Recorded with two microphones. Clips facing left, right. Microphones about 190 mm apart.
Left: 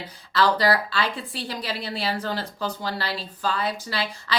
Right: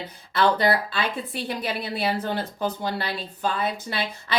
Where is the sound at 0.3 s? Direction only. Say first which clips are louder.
Even; 25° right (ahead or behind).